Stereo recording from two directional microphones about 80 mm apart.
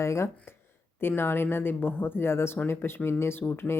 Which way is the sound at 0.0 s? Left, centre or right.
Left.